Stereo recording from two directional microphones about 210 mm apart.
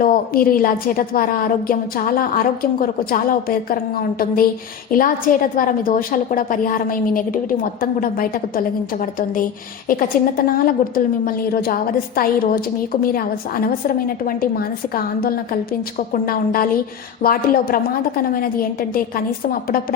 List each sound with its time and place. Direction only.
0.0 s a woman's voice: 40° left (ahead or behind)